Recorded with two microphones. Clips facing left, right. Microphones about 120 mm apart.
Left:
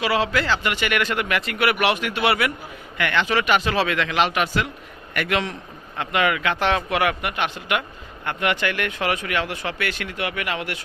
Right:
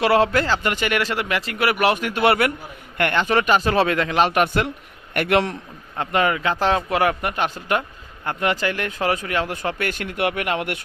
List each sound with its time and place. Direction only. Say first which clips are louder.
0.0 s a man's voice: right 5 dB; 55° right (ahead or behind)
0.3 s a man's voice: right 2 dB; 40° right (ahead or behind); by 5.5 s 55° right (ahead or behind)
6.0 s a man's voice: right 2 dB; 40° right (ahead or behind)